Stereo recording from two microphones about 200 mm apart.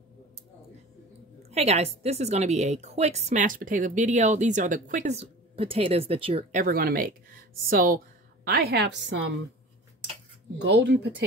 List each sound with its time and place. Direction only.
1.5 s a woman's voice: 30° right (ahead or behind)
6.6 s a woman's voice: 50° right (ahead or behind)
10.6 s a woman's voice: 60° right (ahead or behind)